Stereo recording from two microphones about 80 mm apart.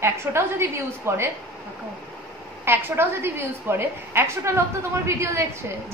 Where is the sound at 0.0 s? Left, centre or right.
Right.